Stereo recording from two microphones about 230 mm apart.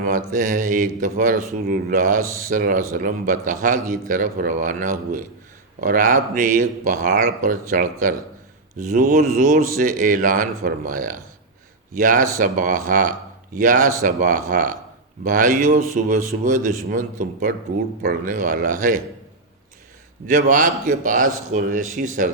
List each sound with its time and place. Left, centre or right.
0.3 s speech: right
20.2 s speech: right